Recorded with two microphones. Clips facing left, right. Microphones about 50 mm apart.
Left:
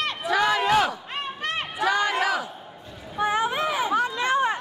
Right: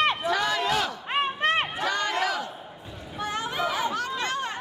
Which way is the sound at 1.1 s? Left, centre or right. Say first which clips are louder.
Right 5 dB; right.